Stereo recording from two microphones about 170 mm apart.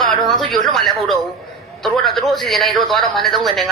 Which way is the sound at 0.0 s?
Centre (ahead or behind).